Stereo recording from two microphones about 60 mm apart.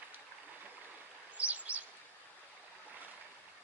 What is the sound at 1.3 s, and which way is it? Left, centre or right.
Bird, right.